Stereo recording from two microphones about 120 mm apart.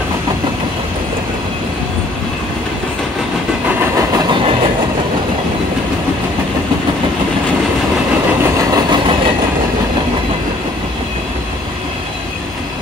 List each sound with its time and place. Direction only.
4.1 s train: 40° right (ahead or behind)
8.5 s train: 35° right (ahead or behind)